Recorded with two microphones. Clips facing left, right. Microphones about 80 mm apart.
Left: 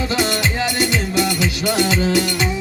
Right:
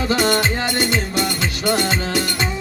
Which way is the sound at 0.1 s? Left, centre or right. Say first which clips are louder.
Right 2 dB; right.